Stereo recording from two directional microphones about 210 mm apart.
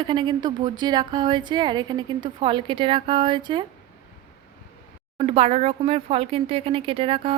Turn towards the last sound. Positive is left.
turn(degrees=-25)  # may be behind; listen again after turning